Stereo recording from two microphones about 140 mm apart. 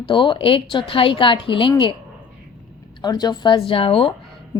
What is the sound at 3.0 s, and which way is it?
Speech, 30° left (ahead or behind).